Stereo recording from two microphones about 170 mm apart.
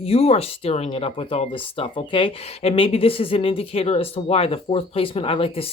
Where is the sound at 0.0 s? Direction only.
35° left (ahead or behind).